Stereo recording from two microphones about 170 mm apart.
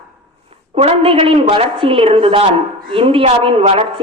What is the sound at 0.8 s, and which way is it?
A woman's voice, 35° right (ahead or behind).